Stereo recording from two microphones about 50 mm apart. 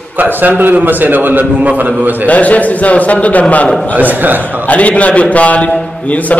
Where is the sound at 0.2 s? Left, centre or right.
Right.